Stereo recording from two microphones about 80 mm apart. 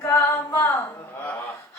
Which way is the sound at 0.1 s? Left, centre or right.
Left.